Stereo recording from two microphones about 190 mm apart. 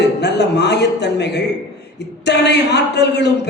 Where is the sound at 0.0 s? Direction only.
65° left (ahead or behind).